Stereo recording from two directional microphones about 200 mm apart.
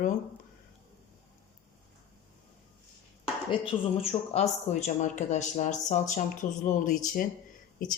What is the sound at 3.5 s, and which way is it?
Speech, 25° left (ahead or behind).